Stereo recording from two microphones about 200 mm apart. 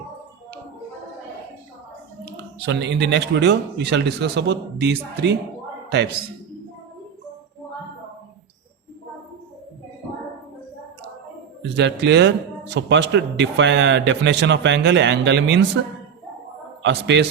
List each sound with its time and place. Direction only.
2.2 s speech: 60° right (ahead or behind)
11.7 s speech: 60° right (ahead or behind)
16.8 s speech: 60° right (ahead or behind)